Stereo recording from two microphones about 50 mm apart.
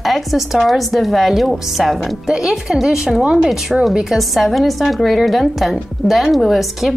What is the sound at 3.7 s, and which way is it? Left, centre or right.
A woman's voice, centre.